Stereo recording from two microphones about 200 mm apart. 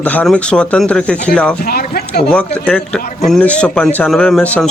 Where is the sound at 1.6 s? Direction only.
50° left (ahead or behind).